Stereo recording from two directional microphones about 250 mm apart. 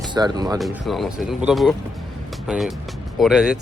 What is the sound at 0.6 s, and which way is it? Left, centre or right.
Speech, centre.